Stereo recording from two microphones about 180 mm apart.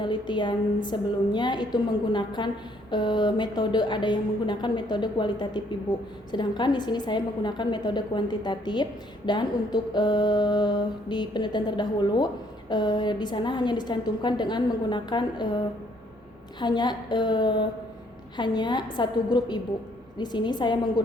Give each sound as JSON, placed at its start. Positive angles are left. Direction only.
{"t": 0.0, "sound": "a woman's voice", "side_deg": 25}
{"t": 16.6, "sound": "a woman's voice", "side_deg": 25}